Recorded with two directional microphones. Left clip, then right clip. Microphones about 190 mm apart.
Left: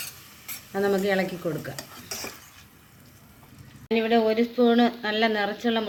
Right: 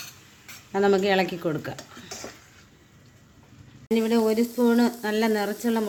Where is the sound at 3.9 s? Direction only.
50° right (ahead or behind).